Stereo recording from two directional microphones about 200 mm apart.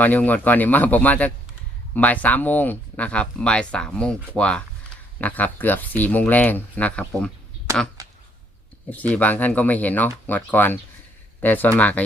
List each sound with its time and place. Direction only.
0.0 s speech: 10° left (ahead or behind)
8.0 s a sound: 15° right (ahead or behind)
8.9 s speech: 10° left (ahead or behind)